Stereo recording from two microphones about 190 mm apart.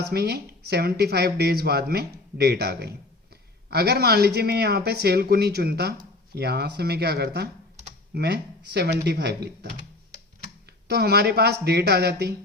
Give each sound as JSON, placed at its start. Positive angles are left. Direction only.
{"t": 0.0, "sound": "speech", "side_deg": -55}
{"t": 10.8, "sound": "speech", "side_deg": -55}